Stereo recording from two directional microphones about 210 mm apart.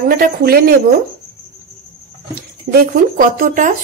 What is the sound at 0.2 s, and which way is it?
Speech, 45° right (ahead or behind).